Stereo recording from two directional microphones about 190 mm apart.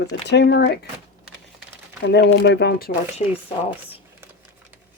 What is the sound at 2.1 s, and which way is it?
Speech, 65° left (ahead or behind).